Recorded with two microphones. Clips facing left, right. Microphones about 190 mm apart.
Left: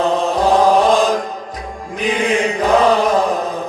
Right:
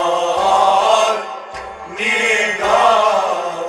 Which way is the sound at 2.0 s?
35° left (ahead or behind).